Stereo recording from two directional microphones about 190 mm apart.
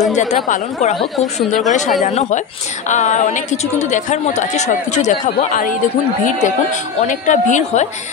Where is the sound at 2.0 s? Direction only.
40° left (ahead or behind).